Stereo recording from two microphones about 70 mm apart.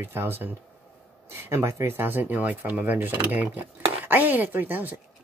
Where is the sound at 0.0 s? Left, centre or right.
Right.